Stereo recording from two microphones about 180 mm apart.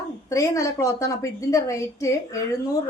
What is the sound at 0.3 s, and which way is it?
A woman's voice, 15° left (ahead or behind).